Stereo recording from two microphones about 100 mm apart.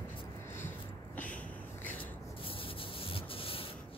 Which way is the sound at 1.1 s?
15° left (ahead or behind).